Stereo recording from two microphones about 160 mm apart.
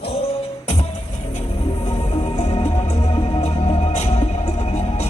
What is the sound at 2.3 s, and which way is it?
Music, 40° left (ahead or behind).